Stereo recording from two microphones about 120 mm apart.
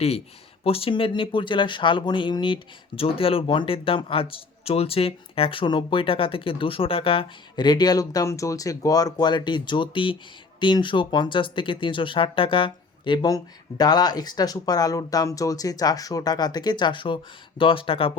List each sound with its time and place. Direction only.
0.6 s speech: 50° left (ahead or behind)
13.2 s speech: 35° left (ahead or behind); by 18.1 s 50° left (ahead or behind)